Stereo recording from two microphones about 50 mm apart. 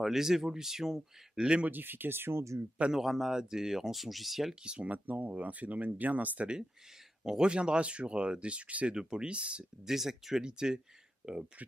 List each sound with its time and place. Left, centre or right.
0.0 s speech: centre
1.7 s speech: right
2.9 s speech: centre
4.6 s speech: right
7.2 s speech: centre
8.9 s speech: centre
9.8 s speech: centre